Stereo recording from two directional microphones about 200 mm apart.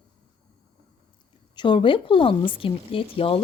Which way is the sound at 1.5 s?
25° left (ahead or behind).